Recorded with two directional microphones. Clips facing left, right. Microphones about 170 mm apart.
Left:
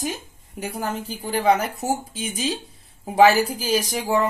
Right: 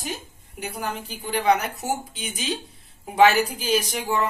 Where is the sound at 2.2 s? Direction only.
30° left (ahead or behind).